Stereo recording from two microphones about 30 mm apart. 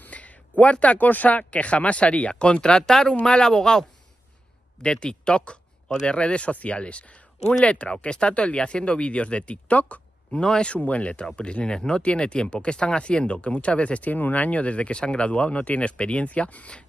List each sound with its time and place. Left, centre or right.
0.1 s a sound: left
0.9 s speech: left
1.5 s speech: left
5.0 s speech: left
10.3 s speech: left
10.7 s speech: left
11.3 s speech: left
14.1 s speech: left